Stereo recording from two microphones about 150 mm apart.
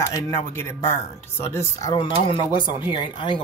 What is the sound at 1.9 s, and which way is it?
Speech, 35° left (ahead or behind).